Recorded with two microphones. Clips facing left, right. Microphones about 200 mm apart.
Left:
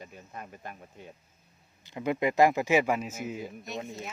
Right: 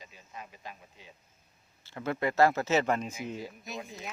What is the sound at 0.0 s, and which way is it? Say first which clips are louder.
Speech: left 4 dB; 55° left (ahead or behind).